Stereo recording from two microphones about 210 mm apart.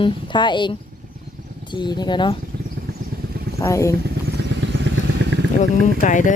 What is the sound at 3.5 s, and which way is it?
Speech, 15° left (ahead or behind).